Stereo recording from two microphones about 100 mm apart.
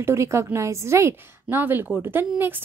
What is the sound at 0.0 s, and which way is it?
A woman's voice, 30° right (ahead or behind).